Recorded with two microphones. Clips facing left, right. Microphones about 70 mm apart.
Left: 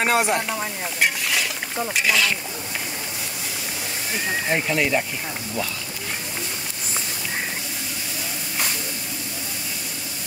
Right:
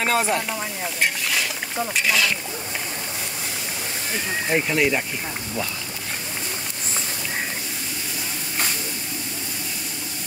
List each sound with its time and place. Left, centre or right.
0.0 s speech: centre
1.3 s boat: centre
4.5 s speech: centre